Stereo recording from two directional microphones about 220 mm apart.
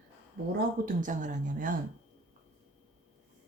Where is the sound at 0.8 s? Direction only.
35° right (ahead or behind).